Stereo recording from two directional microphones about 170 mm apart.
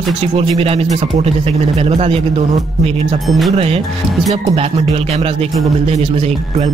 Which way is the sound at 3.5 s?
35° right (ahead or behind).